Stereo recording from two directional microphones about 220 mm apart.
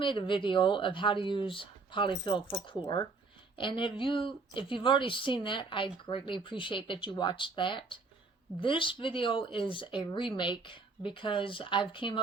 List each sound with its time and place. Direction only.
0.0 s speech: 20° left (ahead or behind)